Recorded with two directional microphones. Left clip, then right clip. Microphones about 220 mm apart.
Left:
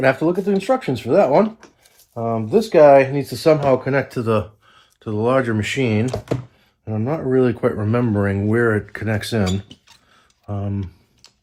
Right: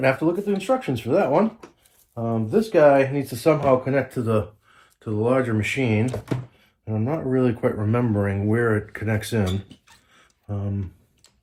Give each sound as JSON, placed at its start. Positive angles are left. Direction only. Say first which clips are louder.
{"t": 0.0, "sound": "speech", "louder": "left 4 dB", "side_deg": 50}